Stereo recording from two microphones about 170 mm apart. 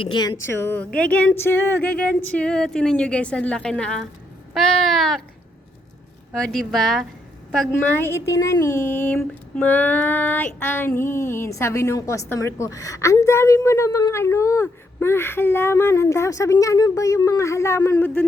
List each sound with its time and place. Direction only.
0.0 s speech: 25° left (ahead or behind); by 5.2 s centre (ahead or behind)
6.3 s speech: 5° left (ahead or behind)
7.7 s speech: 10° left (ahead or behind)